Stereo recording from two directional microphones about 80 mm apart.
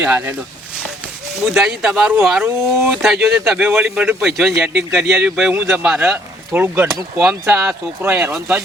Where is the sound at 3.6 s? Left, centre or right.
Centre.